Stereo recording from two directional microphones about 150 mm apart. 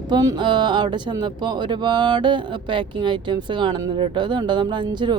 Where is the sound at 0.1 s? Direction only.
25° right (ahead or behind).